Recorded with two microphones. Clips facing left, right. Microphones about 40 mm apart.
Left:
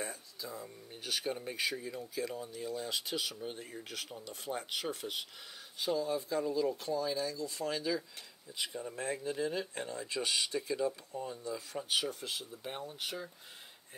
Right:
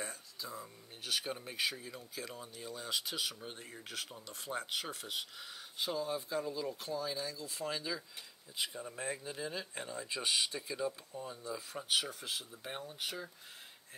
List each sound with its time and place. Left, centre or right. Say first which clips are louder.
0.0 s speech: left 2 dB; centre
2.3 s speech: left 6 dB; centre
2.6 s speech: left 1 dB; centre